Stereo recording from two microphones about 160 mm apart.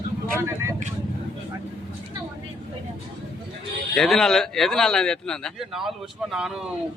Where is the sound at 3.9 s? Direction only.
5° left (ahead or behind).